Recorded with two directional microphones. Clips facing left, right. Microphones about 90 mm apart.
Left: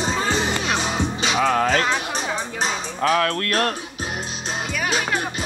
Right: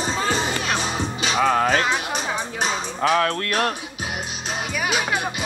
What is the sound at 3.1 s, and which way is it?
Speech, 25° right (ahead or behind).